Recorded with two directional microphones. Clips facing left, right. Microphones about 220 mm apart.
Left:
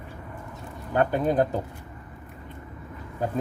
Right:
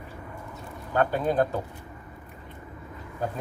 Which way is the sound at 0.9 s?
15° left (ahead or behind).